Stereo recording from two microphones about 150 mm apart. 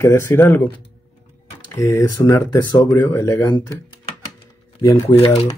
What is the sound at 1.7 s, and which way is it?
Speech, 20° left (ahead or behind).